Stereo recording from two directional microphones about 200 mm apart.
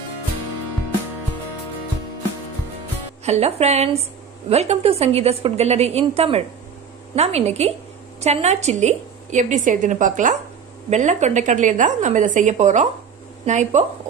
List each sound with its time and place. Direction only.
3.3 s a woman's voice: 30° right (ahead or behind)